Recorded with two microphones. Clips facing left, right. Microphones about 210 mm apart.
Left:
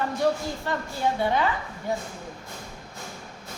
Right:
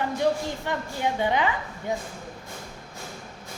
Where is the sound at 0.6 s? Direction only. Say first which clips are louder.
Left 2 dB; 15° right (ahead or behind).